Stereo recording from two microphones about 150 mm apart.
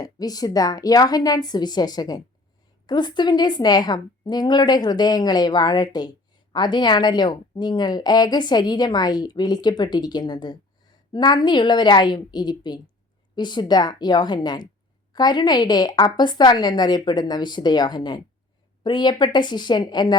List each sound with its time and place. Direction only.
0.0 s speech: 25° left (ahead or behind)